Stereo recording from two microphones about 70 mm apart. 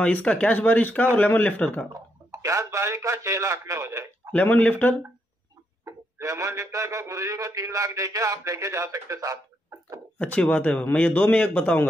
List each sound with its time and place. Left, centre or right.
0.0 s a man's voice: centre
1.9 s speech: right
4.3 s a man's voice: left
5.9 s speech: right
10.1 s a man's voice: centre